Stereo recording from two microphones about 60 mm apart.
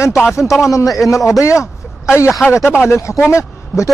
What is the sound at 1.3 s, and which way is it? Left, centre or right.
Speech, left.